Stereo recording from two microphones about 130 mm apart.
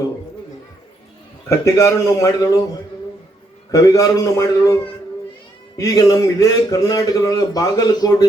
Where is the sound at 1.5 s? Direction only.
25° left (ahead or behind).